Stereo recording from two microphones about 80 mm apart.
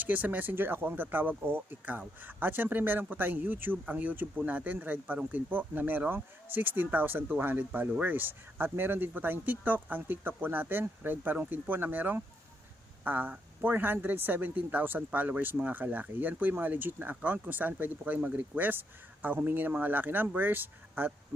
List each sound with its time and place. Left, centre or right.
0.0 s speech: right